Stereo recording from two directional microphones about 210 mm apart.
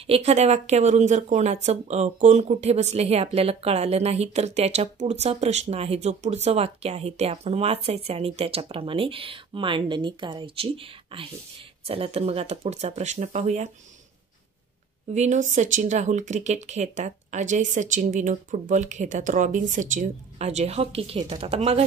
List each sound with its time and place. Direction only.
0.0 s speech: 30° right (ahead or behind)
15.1 s speech: 35° right (ahead or behind)